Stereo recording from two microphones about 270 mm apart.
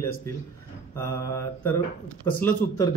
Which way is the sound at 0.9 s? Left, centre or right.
Centre.